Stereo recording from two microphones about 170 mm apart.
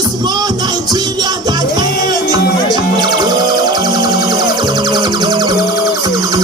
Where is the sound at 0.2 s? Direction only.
25° right (ahead or behind).